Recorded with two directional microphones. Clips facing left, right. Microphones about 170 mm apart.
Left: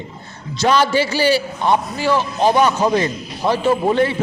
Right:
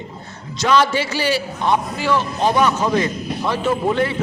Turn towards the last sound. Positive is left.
turn(degrees=30)  # may be behind; listen again after turning